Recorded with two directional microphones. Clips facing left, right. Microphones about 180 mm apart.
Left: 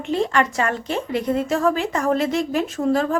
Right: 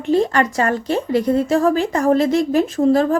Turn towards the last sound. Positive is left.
turn(degrees=-35)  # may be behind; listen again after turning